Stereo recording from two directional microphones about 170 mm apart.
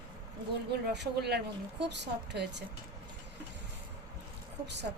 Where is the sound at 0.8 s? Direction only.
80° right.